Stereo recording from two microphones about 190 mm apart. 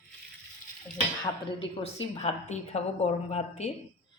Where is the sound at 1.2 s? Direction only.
30° left (ahead or behind).